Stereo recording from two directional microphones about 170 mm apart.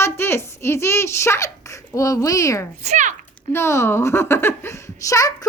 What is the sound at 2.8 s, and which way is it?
Speech, 45° right (ahead or behind).